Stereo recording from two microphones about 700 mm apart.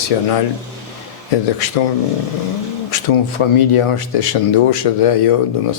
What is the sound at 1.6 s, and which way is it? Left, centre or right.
Speech, left.